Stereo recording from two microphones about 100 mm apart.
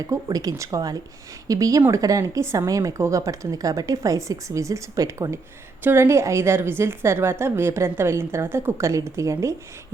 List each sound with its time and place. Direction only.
0.3 s a woman's voice: 40° right (ahead or behind)